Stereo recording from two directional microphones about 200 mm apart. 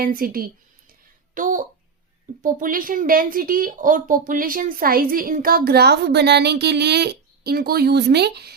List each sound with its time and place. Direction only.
0.0 s speech: 45° right (ahead or behind)